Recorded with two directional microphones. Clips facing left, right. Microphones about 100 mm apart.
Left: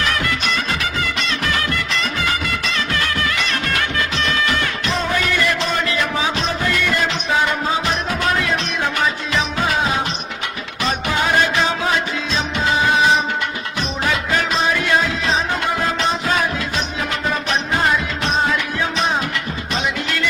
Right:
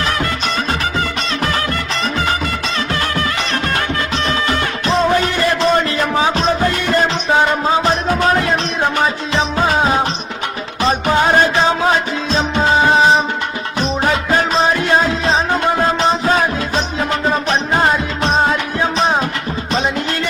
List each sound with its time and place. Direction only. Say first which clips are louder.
0.0 s music: right 2 dB; 30° right (ahead or behind)